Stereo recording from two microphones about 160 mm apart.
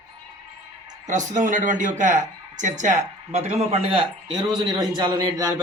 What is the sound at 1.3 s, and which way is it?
Speech, 50° right (ahead or behind).